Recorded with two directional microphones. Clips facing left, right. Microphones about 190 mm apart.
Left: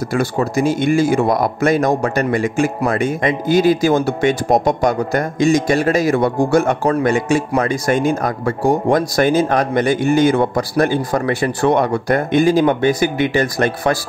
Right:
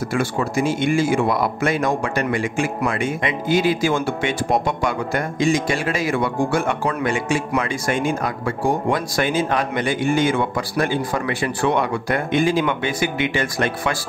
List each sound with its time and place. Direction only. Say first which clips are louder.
0.1 s speech: left 4 dB; 40° left (ahead or behind)